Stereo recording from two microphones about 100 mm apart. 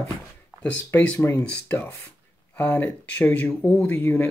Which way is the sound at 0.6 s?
15° left (ahead or behind).